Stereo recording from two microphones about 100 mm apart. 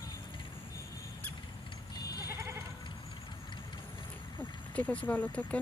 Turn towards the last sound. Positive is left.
turn(degrees=15)  # may be behind; listen again after turning